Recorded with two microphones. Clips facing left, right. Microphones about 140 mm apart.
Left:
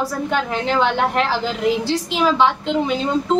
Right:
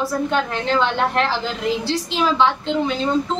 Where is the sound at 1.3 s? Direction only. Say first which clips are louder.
Left 3 dB; 45° left (ahead or behind).